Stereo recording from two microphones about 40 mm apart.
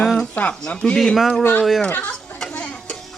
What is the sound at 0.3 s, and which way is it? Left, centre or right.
Speech, left.